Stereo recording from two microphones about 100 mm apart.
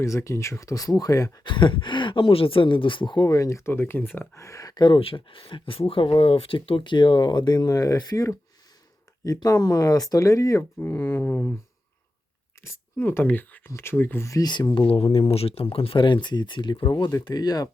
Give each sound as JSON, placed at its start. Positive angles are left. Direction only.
{"t": 0.0, "sound": "speech", "side_deg": 30}
{"t": 1.5, "sound": "speech", "side_deg": 55}
{"t": 3.2, "sound": "speech", "side_deg": 35}
{"t": 10.8, "sound": "speech", "side_deg": 20}
{"t": 12.6, "sound": "speech", "side_deg": 20}
{"t": 14.4, "sound": "speech", "side_deg": 45}
{"t": 14.8, "sound": "speech", "side_deg": 70}